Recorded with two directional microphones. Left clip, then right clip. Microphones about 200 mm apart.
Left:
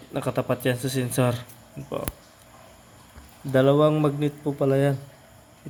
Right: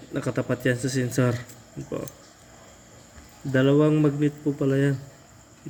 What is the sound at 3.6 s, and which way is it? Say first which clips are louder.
Speech: even; 30° left (ahead or behind).